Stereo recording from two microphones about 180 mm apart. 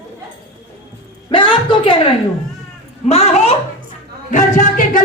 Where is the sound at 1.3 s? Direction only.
30° left (ahead or behind).